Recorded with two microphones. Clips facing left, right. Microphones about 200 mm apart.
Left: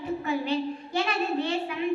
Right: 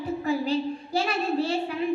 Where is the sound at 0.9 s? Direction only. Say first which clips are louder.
Right 2 dB; 35° right (ahead or behind).